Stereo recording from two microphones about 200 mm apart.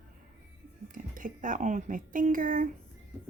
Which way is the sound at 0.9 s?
40° right (ahead or behind).